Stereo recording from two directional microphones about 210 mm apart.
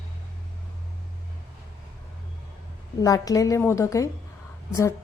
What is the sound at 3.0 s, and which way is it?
A woman's voice, 15° left (ahead or behind).